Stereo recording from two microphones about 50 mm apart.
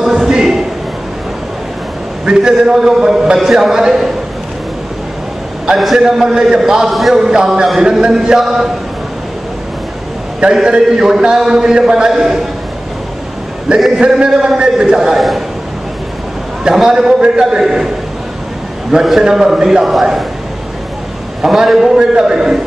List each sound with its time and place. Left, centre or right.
0.0 s a sound: centre
2.2 s a man's voice: centre
5.9 s a man's voice: centre
6.9 s a man's voice: centre
7.2 s a man's voice: centre
10.4 s a man's voice: centre
13.7 s a man's voice: centre
15.1 s a man's voice: centre
16.7 s a man's voice: centre
18.9 s a man's voice: centre
21.4 s a man's voice: centre